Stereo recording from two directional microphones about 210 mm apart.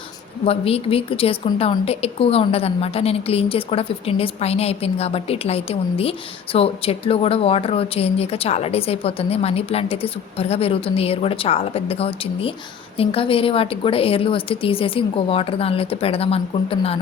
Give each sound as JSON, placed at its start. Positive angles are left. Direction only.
{"t": 0.4, "sound": "a woman's voice", "side_deg": 25}